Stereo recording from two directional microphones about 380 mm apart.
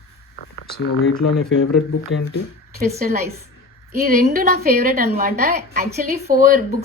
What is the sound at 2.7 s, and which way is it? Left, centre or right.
A woman's voice, right.